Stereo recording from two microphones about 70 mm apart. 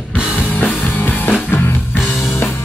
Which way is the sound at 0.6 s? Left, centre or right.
Left.